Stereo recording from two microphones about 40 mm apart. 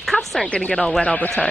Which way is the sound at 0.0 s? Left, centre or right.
Centre.